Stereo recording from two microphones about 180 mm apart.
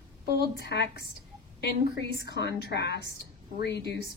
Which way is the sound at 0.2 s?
65° left (ahead or behind).